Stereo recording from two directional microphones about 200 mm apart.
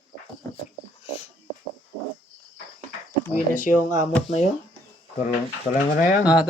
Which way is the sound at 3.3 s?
40° left (ahead or behind).